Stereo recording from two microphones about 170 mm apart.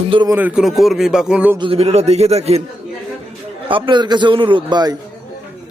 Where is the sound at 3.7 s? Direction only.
30° right (ahead or behind).